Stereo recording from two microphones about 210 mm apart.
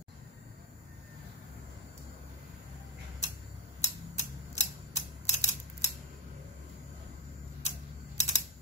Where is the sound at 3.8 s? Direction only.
35° left (ahead or behind).